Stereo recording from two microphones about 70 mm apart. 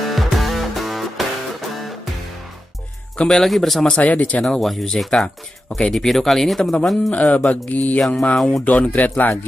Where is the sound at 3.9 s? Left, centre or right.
Centre.